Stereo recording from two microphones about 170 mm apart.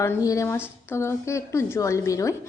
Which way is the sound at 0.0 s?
20° left (ahead or behind).